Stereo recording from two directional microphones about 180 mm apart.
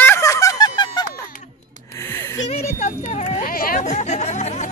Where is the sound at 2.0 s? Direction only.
15° left (ahead or behind).